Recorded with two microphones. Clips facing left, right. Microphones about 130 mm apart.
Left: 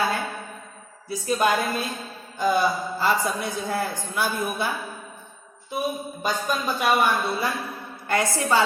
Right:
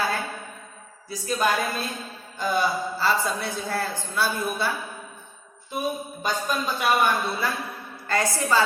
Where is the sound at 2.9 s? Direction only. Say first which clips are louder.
Left 1 dB; 15° left (ahead or behind).